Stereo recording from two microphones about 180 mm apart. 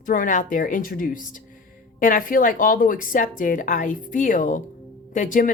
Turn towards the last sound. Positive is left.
turn(degrees=45)  # may be behind; listen again after turning